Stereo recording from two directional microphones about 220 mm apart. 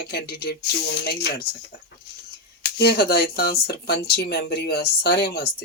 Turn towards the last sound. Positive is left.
turn(degrees=45)  # may be behind; listen again after turning